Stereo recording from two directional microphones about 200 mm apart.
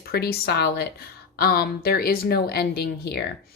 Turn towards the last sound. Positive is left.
turn(degrees=50)  # may be behind; listen again after turning